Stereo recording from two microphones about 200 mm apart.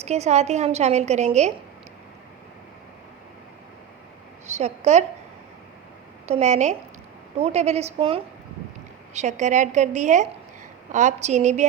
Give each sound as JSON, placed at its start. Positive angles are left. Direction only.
{"t": 0.0, "sound": "a woman's voice", "side_deg": -35}
{"t": 4.5, "sound": "a woman's voice", "side_deg": -35}
{"t": 6.2, "sound": "a woman's voice", "side_deg": -35}